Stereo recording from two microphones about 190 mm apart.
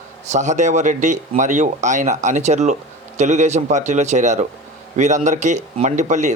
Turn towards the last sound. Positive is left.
turn(degrees=-40)  # may be behind; listen again after turning